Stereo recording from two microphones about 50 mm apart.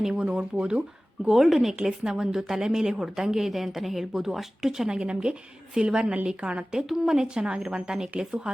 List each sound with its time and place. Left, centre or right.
0.0 s a woman's voice: centre
1.3 s a woman's voice: centre
6.7 s a woman's voice: centre